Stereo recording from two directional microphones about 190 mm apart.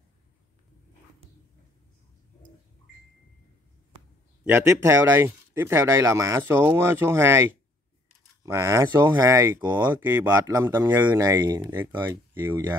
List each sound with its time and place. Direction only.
4.5 s speech: 10° right (ahead or behind)